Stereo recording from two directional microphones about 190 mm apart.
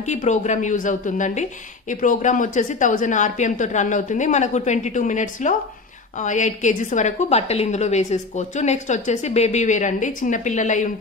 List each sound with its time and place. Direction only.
0.0 s a woman's voice: 40° left (ahead or behind)